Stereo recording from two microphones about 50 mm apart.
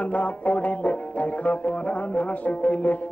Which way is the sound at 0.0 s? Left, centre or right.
Left.